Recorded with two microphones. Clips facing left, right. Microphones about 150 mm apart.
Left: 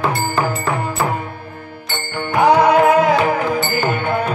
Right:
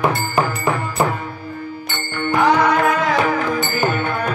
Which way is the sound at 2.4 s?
30° left (ahead or behind).